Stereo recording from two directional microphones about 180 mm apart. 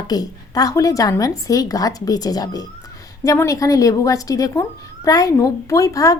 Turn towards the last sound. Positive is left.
turn(degrees=20)  # may be behind; listen again after turning